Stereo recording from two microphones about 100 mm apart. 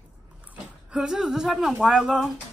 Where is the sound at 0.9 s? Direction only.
5° right (ahead or behind).